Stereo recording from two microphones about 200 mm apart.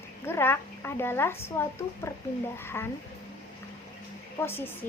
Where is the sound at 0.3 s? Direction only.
10° left (ahead or behind).